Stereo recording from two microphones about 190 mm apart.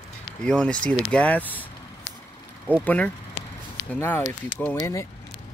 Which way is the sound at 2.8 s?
5° left (ahead or behind).